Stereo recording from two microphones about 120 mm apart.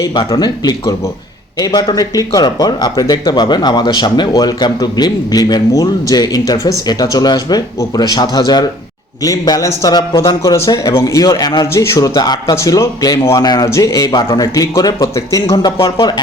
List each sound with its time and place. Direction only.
0.0 s a man's voice: 40° left (ahead or behind)
14.1 s speech: 40° left (ahead or behind)